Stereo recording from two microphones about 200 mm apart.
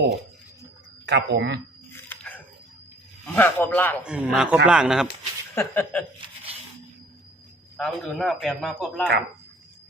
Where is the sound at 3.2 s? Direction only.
10° left (ahead or behind).